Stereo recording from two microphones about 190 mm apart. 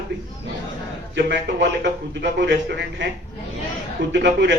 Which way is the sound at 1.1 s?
65° right (ahead or behind).